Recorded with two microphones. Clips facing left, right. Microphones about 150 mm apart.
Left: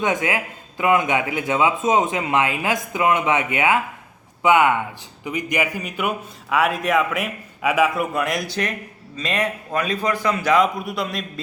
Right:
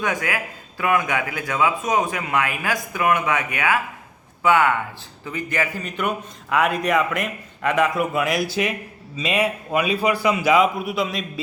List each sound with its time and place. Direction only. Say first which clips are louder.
0.0 s a man's voice: left 3 dB; 20° left (ahead or behind); by 11.3 s centre (ahead or behind)